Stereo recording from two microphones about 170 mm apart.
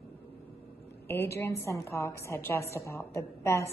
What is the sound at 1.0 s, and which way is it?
A woman's voice, 15° left (ahead or behind).